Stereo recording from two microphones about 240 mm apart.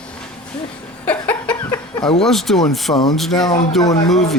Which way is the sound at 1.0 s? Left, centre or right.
Centre.